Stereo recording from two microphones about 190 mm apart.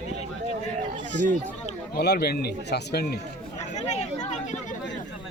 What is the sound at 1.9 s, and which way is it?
Speech, 55° left (ahead or behind).